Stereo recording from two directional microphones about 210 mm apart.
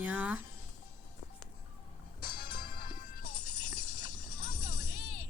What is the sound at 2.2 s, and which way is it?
Music, 45° left (ahead or behind).